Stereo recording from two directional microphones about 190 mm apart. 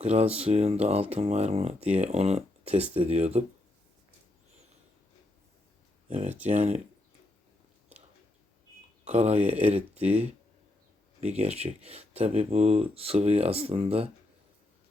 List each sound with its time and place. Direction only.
0.0 s speech: 35° right (ahead or behind)
6.1 s speech: 35° right (ahead or behind)
9.0 s speech: 35° right (ahead or behind)